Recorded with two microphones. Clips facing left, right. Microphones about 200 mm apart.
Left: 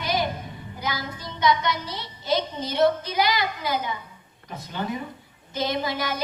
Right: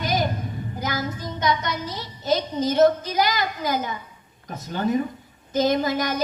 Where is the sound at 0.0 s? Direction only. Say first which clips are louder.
Right 2 dB; 45° right (ahead or behind).